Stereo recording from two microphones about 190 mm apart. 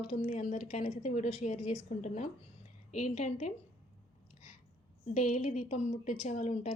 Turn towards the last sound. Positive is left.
turn(degrees=40)  # may be behind; listen again after turning